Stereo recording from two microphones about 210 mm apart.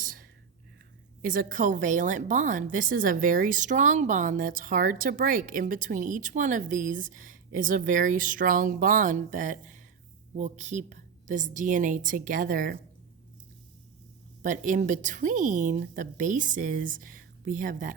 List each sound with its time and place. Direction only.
0.0 s whispering: 40° right (ahead or behind)
1.2 s a woman's voice: 40° right (ahead or behind)
14.4 s a woman's voice: 35° right (ahead or behind)